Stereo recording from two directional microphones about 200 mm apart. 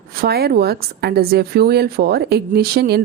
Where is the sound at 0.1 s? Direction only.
50° right (ahead or behind).